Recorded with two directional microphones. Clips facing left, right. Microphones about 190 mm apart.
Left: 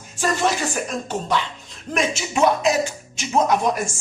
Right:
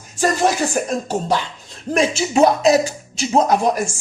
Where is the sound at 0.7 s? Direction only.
40° right (ahead or behind).